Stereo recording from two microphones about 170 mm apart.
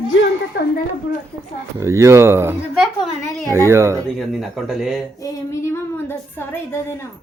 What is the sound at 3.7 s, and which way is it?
Speech, 15° right (ahead or behind).